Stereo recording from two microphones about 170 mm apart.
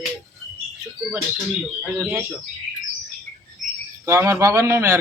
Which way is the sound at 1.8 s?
10° right (ahead or behind).